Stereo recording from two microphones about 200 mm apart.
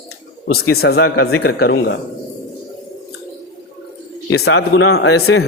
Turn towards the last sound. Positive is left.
turn(degrees=60)  # may be behind; listen again after turning